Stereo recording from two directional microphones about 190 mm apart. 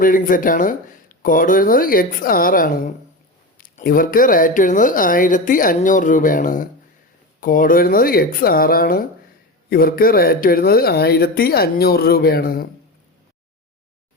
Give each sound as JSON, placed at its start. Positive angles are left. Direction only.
{"t": 0.0, "sound": "speech", "side_deg": 45}